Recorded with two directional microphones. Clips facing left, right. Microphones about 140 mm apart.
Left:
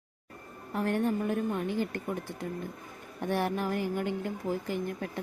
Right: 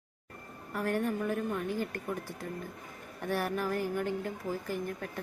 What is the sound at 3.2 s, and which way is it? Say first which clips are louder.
A woman's voice: left 2 dB; 20° left (ahead or behind).